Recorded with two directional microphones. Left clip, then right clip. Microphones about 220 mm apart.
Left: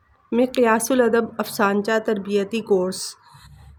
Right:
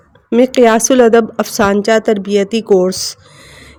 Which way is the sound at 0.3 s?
30° right (ahead or behind).